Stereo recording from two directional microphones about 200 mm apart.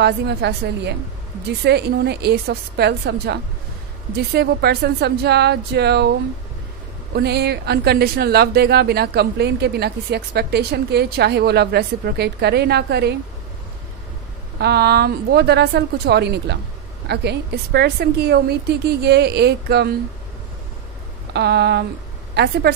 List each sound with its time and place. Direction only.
0.0 s a woman's voice: 55° right (ahead or behind)
7.2 s speech: 55° right (ahead or behind)
14.6 s a woman's voice: 55° right (ahead or behind)
21.3 s a woman's voice: 55° right (ahead or behind)